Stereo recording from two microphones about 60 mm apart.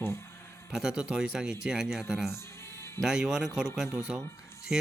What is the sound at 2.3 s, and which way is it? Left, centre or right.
Music, left.